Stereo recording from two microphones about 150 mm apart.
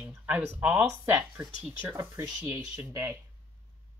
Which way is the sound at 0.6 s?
10° right (ahead or behind).